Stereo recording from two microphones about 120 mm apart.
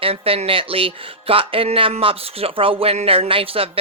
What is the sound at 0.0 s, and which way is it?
A woman's voice, 50° right (ahead or behind).